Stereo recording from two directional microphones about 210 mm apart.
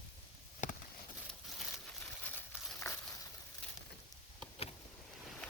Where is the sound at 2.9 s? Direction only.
15° left (ahead or behind).